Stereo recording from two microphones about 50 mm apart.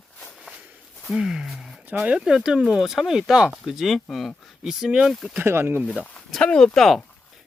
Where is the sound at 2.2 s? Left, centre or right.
Centre.